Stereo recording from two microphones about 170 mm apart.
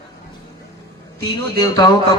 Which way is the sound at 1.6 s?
25° left (ahead or behind).